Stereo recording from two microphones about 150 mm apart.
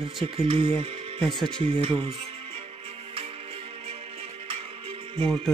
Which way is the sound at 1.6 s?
40° right (ahead or behind).